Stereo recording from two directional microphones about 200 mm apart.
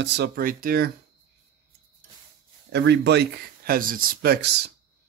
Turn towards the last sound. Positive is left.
turn(degrees=-55)  # may be behind; listen again after turning